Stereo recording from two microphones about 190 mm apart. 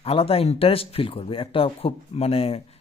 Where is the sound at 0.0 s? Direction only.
30° left (ahead or behind).